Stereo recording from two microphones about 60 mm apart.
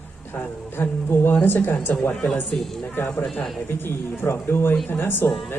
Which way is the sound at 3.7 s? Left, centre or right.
Left.